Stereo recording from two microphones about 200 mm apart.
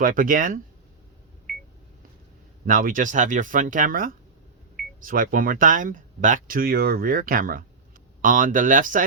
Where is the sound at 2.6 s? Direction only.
45° right (ahead or behind).